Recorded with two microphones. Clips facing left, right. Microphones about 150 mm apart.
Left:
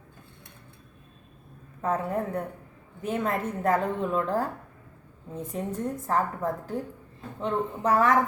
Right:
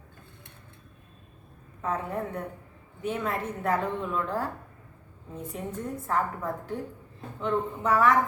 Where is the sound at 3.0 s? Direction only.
35° left (ahead or behind).